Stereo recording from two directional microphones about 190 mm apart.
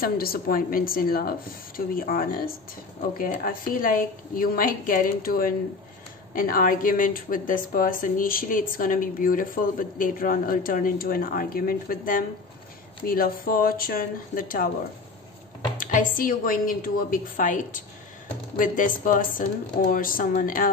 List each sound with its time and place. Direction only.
0.0 s a woman's voice: 50° left (ahead or behind)
15.8 s a woman's voice: 45° left (ahead or behind)